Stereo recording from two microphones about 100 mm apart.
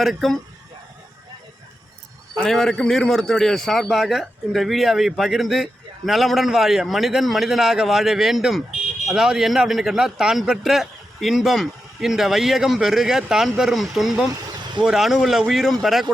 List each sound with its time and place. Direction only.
0.0 s a man's voice: centre (ahead or behind)
2.3 s a man's voice: 5° left (ahead or behind)
14.4 s vehicle: 45° right (ahead or behind)
14.8 s a man's voice: 5° right (ahead or behind)